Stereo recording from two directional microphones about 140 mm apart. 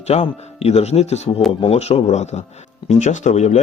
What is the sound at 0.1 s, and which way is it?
Speech, 45° left (ahead or behind).